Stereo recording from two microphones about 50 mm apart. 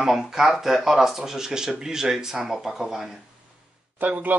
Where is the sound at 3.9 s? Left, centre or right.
Right.